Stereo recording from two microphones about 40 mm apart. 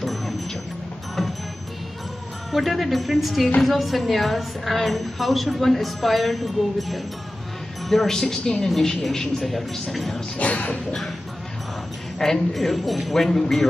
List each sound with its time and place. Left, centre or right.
0.0 s music: centre
2.5 s a woman's voice: centre
8.1 s a woman's voice: centre
10.3 s jingle bell: left
12.2 s a woman's voice: centre
13.1 s speech: centre